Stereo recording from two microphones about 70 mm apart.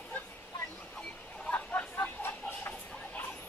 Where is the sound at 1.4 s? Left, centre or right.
Left.